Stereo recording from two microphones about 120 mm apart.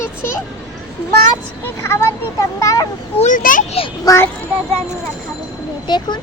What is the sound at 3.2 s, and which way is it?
Speech, 90° left.